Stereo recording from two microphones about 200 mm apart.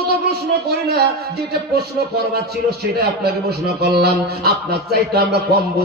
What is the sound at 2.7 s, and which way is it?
A man's voice, 50° right (ahead or behind).